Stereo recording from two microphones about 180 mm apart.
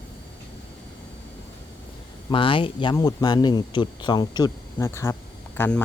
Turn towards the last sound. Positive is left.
turn(degrees=10)  # may be behind; listen again after turning